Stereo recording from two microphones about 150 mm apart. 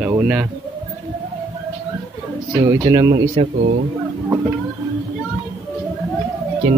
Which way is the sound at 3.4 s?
35° right (ahead or behind).